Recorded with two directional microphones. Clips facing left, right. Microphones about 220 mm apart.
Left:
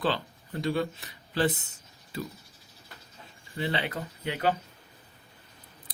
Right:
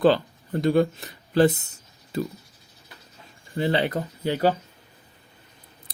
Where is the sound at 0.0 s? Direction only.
45° right (ahead or behind).